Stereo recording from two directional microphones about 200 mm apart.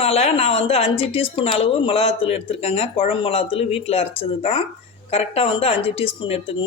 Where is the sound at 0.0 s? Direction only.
30° left (ahead or behind).